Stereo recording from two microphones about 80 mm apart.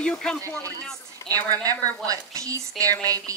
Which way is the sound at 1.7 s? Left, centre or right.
Right.